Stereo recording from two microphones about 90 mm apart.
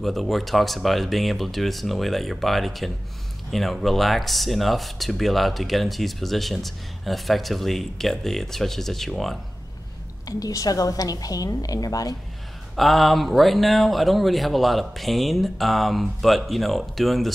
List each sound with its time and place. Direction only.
0.0 s speech: centre (ahead or behind)
10.2 s a woman's voice: 40° left (ahead or behind)
12.7 s speech: centre (ahead or behind)